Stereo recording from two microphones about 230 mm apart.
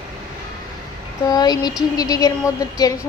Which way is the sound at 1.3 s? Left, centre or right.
Centre.